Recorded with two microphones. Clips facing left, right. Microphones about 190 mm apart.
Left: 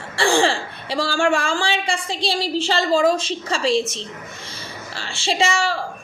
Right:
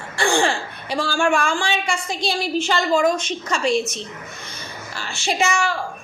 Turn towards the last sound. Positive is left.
turn(degrees=30)  # may be behind; listen again after turning